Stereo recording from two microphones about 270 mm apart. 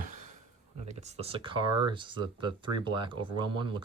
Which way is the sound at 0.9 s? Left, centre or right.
Right.